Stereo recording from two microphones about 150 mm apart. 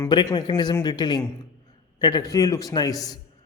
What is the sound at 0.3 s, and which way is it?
Speech, 30° left (ahead or behind).